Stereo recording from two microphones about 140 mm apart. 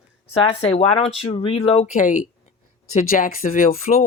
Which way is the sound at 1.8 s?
65° left (ahead or behind).